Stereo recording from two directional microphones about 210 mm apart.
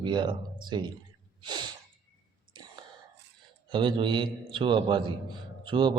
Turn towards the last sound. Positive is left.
turn(degrees=-25)  # may be behind; listen again after turning